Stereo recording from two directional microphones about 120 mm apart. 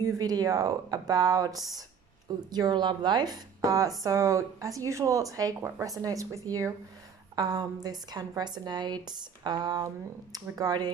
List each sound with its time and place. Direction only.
0.2 s a woman's voice: 30° right (ahead or behind)